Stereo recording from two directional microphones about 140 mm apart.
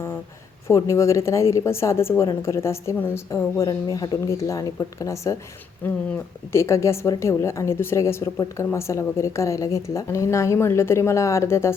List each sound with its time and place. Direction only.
0.7 s a woman's voice: 20° left (ahead or behind)